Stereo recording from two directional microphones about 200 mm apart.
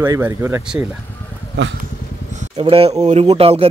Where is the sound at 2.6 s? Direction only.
30° right (ahead or behind).